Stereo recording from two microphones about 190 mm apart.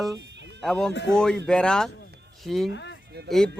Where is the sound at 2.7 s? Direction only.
70° left (ahead or behind).